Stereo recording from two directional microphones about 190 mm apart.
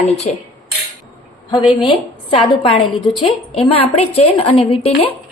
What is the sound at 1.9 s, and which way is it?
A woman's voice, 30° left (ahead or behind).